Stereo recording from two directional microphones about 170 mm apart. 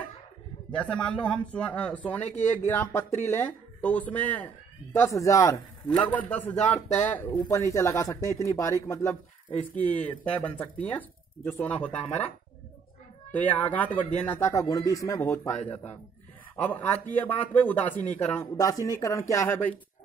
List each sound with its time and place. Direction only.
0.7 s speech: 5° left (ahead or behind)
9.8 s speech: 10° left (ahead or behind)
13.3 s speech: 10° left (ahead or behind)
16.6 s speech: 10° left (ahead or behind)